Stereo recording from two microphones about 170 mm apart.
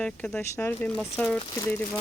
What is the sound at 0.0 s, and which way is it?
Speech, 5° left (ahead or behind).